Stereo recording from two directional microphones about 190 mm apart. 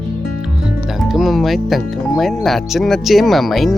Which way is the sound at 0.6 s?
Centre (ahead or behind).